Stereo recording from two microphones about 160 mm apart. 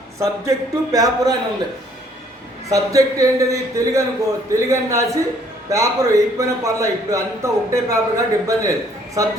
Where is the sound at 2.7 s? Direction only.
20° right (ahead or behind).